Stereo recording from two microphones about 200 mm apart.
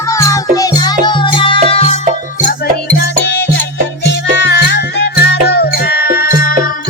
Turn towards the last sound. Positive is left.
turn(degrees=50)  # may be behind; listen again after turning